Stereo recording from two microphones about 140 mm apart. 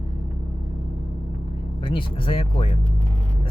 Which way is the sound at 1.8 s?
40° left (ahead or behind).